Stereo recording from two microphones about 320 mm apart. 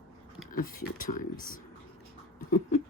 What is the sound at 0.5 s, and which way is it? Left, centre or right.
Speech, left.